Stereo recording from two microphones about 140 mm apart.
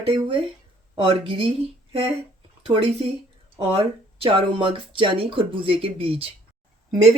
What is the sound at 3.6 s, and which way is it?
Speech, 40° right (ahead or behind).